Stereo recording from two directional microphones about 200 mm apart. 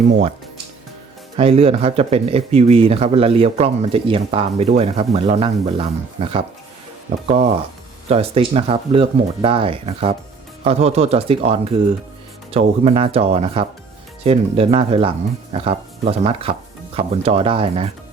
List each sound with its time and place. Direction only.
1.4 s speech: 30° right (ahead or behind)
7.3 s speech: 30° right (ahead or behind)